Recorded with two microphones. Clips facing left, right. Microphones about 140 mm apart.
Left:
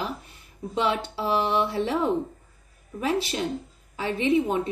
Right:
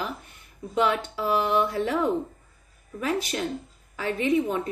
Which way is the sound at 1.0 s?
30° left (ahead or behind).